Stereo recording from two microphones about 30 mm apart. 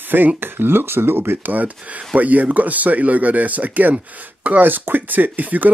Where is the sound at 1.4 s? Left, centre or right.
Right.